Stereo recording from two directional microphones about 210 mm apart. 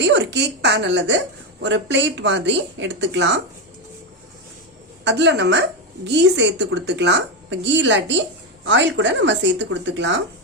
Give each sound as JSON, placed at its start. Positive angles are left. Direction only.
{"t": 0.0, "sound": "speech", "side_deg": -55}
{"t": 5.0, "sound": "speech", "side_deg": -55}